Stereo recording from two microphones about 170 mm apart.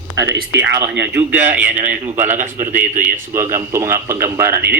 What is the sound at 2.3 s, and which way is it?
Speech, 50° right (ahead or behind).